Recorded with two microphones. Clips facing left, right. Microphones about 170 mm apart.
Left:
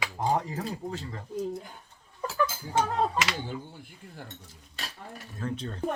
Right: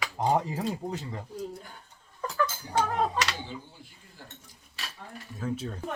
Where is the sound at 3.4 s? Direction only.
55° left (ahead or behind).